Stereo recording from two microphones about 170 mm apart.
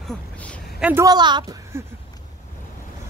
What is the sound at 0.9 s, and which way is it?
Speech, 20° right (ahead or behind).